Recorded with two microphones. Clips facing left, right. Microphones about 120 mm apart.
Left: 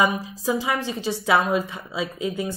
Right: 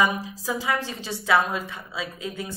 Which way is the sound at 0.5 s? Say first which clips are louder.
Left 3 dB; 20° left (ahead or behind).